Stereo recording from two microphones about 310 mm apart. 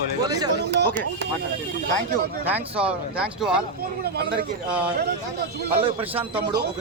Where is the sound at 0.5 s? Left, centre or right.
Right.